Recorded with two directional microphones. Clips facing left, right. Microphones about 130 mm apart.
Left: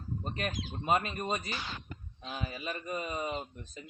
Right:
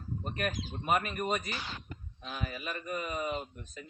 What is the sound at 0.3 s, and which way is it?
Speech, 25° left (ahead or behind).